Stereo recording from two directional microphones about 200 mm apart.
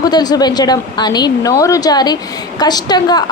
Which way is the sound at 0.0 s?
20° left (ahead or behind).